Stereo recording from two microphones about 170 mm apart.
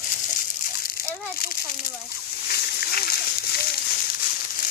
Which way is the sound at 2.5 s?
65° left (ahead or behind).